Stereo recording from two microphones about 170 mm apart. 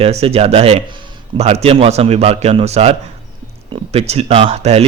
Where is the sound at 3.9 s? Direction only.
35° right (ahead or behind).